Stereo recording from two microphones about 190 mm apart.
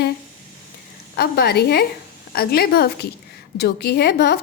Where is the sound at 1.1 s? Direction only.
55° left (ahead or behind).